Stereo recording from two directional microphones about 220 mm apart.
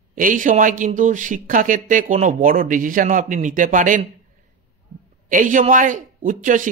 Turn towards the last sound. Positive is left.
turn(degrees=-35)  # may be behind; listen again after turning